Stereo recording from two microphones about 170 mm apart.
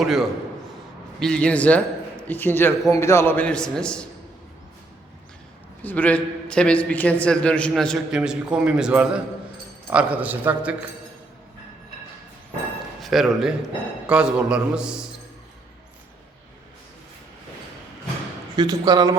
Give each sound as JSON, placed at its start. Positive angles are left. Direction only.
{"t": 0.0, "sound": "a man's voice", "side_deg": 0}
{"t": 5.8, "sound": "a man's voice", "side_deg": 10}
{"t": 13.0, "sound": "a man's voice", "side_deg": 0}
{"t": 18.5, "sound": "speech", "side_deg": -25}